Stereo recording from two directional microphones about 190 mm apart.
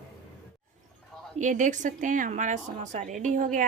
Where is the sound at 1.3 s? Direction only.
40° right (ahead or behind).